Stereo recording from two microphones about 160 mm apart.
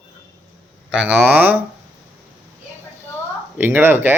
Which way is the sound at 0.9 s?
5° right (ahead or behind).